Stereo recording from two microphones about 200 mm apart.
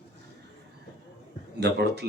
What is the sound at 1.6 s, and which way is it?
Speech, 55° right (ahead or behind).